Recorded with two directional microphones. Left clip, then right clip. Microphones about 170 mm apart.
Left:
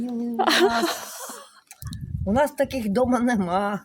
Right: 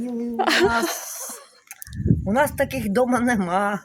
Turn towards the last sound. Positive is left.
turn(degrees=-5)  # may be behind; listen again after turning